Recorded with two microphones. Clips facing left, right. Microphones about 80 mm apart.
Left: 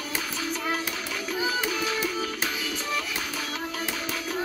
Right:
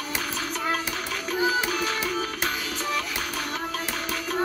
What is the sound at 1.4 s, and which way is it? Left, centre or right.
Music, right.